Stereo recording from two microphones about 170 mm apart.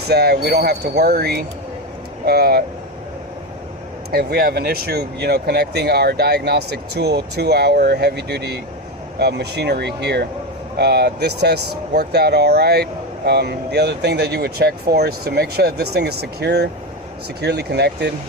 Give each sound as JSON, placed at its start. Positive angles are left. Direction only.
{"t": 0.1, "sound": "speech", "side_deg": -70}
{"t": 4.1, "sound": "speech", "side_deg": -70}